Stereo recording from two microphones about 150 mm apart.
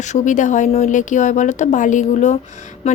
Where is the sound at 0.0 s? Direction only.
55° left (ahead or behind).